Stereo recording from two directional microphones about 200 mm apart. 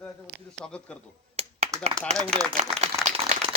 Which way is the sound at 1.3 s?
30° right (ahead or behind).